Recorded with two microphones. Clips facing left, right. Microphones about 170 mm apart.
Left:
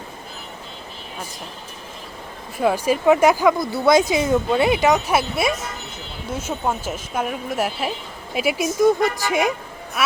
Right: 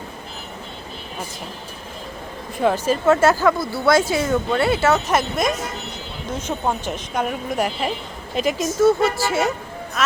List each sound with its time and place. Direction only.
2.6 s speech: 10° left (ahead or behind)